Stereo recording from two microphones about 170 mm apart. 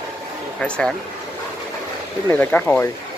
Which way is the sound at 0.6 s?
5° left (ahead or behind).